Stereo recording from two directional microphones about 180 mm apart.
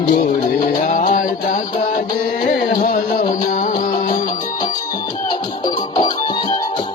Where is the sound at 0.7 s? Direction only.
45° left (ahead or behind).